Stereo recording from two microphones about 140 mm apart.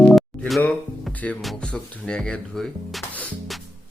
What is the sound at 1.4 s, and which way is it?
Speech, 5° left (ahead or behind).